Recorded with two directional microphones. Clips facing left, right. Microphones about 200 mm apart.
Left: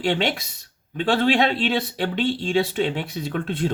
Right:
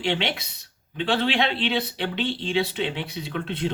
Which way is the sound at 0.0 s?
45° left (ahead or behind).